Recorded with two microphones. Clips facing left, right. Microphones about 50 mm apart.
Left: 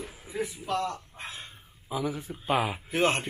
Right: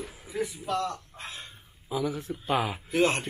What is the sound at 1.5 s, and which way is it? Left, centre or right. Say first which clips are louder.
A man's voice: right 1 dB; centre.